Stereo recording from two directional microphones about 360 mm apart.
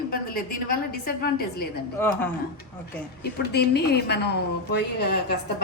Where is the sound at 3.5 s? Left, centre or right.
Left.